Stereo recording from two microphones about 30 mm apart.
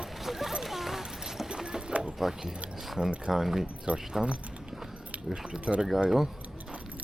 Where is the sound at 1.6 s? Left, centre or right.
Right.